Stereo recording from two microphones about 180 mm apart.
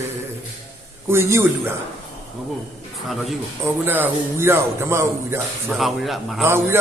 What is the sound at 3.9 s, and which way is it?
Speech, 10° right (ahead or behind).